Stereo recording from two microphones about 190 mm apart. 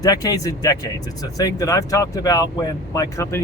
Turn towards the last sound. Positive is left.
turn(degrees=15)  # may be behind; listen again after turning